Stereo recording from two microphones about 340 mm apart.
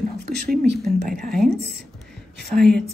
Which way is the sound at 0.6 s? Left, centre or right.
Right.